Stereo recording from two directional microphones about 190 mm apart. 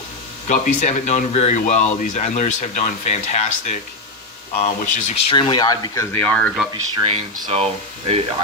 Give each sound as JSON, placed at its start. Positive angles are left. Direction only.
{"t": 0.4, "sound": "speech", "side_deg": 40}
{"t": 5.4, "sound": "speech", "side_deg": 25}
{"t": 6.9, "sound": "speech", "side_deg": -30}